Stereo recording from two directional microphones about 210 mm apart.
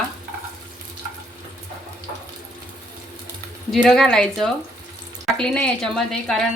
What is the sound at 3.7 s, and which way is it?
A woman's voice, centre (ahead or behind).